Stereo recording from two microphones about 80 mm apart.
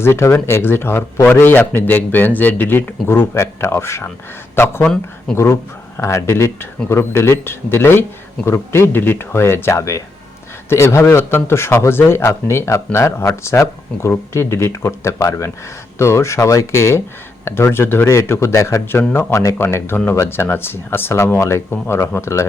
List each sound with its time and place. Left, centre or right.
0.0 s a man's voice: left
6.0 s speech: left
18.9 s a man's voice: left
19.3 s speech: left
19.5 s speech: left